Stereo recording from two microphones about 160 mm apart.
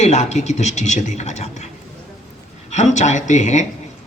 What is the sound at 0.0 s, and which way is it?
A man's voice, 45° left (ahead or behind).